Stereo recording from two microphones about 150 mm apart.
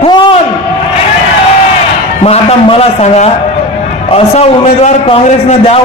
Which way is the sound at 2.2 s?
40° left (ahead or behind).